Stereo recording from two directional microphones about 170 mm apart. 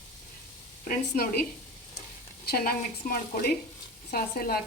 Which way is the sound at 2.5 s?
60° left (ahead or behind).